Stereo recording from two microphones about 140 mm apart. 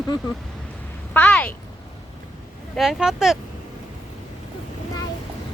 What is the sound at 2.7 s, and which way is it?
Speech, 5° right (ahead or behind).